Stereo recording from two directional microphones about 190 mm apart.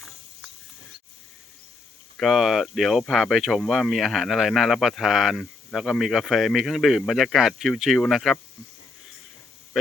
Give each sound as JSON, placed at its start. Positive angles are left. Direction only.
{"t": 2.1, "sound": "speech", "side_deg": 0}